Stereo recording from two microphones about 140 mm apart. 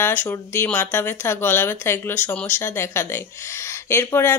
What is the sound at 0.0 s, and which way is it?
Speech, 15° left (ahead or behind).